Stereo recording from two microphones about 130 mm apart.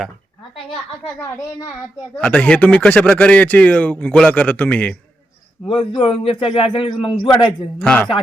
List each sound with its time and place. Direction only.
2.1 s speech: 10° left (ahead or behind)
5.6 s a man's voice: 45° left (ahead or behind)
7.8 s speech: 10° left (ahead or behind)